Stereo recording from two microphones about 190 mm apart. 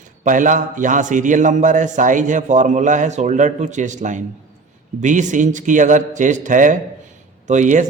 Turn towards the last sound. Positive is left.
turn(degrees=-40)  # may be behind; listen again after turning